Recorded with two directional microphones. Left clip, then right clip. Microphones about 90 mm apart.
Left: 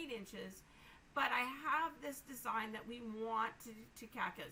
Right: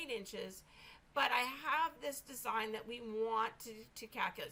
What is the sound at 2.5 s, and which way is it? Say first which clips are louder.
A woman's voice: right 3 dB; 45° right (ahead or behind).